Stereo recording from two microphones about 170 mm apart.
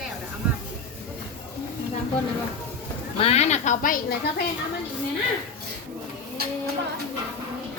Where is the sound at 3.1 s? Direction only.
35° left (ahead or behind).